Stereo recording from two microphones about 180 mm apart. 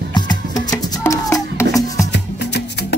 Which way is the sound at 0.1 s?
20° left (ahead or behind).